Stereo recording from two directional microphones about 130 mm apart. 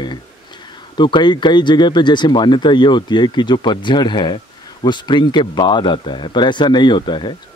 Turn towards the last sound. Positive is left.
turn(degrees=35)  # may be behind; listen again after turning